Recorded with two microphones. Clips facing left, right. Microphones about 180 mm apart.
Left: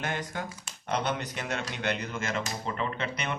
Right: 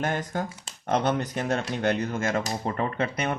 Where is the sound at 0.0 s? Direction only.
45° right (ahead or behind).